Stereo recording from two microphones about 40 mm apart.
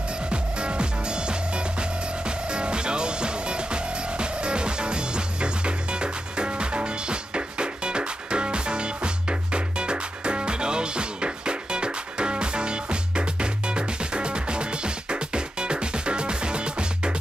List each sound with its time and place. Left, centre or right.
0.3 s music: right